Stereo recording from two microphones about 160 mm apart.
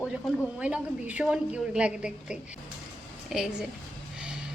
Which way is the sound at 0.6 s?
10° right (ahead or behind).